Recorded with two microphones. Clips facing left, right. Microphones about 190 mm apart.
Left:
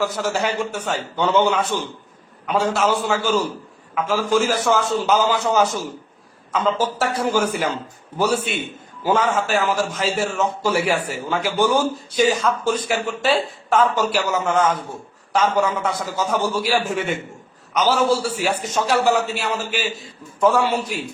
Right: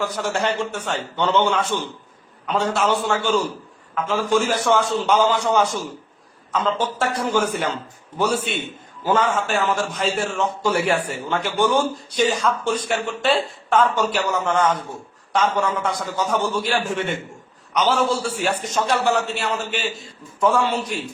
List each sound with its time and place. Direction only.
0.0 s a man's voice: centre (ahead or behind)
9.0 s a man's voice: 10° left (ahead or behind)